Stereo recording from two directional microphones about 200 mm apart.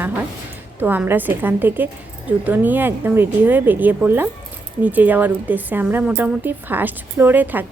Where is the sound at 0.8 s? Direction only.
10° right (ahead or behind).